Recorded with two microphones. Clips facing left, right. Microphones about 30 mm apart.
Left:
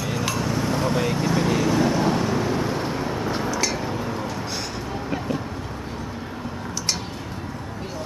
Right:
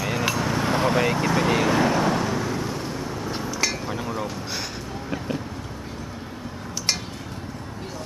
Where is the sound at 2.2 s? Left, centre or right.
Centre.